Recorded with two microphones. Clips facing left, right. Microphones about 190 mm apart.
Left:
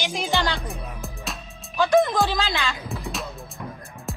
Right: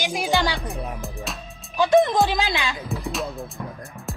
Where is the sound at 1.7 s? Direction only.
20° right (ahead or behind).